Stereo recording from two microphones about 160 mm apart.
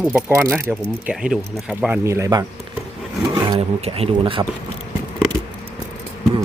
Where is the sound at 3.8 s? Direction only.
40° right (ahead or behind).